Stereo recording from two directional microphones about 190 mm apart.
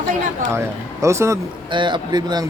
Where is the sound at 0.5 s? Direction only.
15° right (ahead or behind).